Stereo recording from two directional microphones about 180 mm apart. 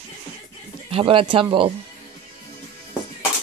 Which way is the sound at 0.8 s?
30° right (ahead or behind).